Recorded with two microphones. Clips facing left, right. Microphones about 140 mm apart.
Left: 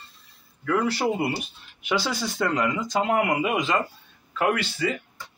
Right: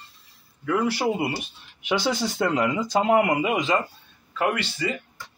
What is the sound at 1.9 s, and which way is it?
Speech, 15° right (ahead or behind).